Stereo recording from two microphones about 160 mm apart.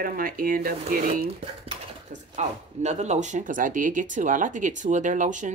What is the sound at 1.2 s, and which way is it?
Speech, 35° right (ahead or behind).